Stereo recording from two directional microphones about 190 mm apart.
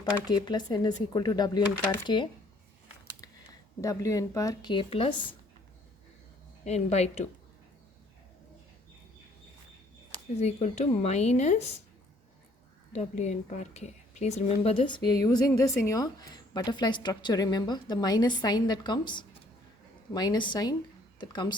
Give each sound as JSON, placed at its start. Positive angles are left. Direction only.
{"t": 0.3, "sound": "a woman's voice", "side_deg": 20}
{"t": 3.8, "sound": "a woman's voice", "side_deg": 15}
{"t": 6.7, "sound": "speech", "side_deg": 35}
{"t": 10.4, "sound": "speech", "side_deg": 35}
{"t": 12.9, "sound": "a woman's voice", "side_deg": 35}